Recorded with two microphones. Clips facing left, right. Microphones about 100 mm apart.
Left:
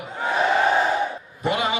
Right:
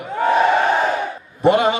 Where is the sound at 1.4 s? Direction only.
45° right (ahead or behind).